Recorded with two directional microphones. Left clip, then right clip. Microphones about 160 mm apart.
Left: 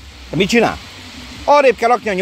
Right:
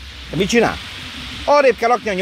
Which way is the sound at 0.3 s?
30° left (ahead or behind).